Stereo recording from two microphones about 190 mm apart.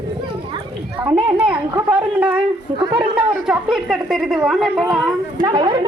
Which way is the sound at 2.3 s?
30° right (ahead or behind).